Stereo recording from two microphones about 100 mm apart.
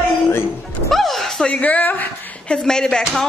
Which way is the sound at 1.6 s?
15° left (ahead or behind).